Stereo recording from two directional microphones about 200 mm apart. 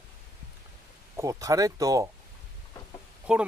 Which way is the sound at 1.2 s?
15° right (ahead or behind).